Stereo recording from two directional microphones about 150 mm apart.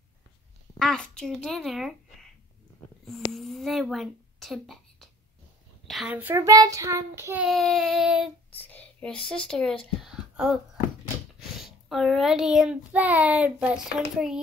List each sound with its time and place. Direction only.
0.7 s a child's voice: 5° left (ahead or behind)
3.1 s a child's voice: centre (ahead or behind)
6.3 s child singing: 20° right (ahead or behind)
7.4 s a child's voice: centre (ahead or behind)
8.6 s whispering: 10° left (ahead or behind)
9.5 s speech: 5° left (ahead or behind)
11.6 s a child's voice: centre (ahead or behind)